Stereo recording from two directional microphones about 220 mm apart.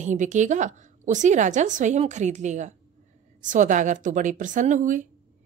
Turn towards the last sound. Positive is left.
turn(degrees=-35)  # may be behind; listen again after turning